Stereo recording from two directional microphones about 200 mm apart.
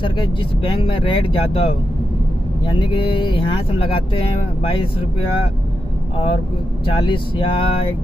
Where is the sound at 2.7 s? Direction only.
25° left (ahead or behind).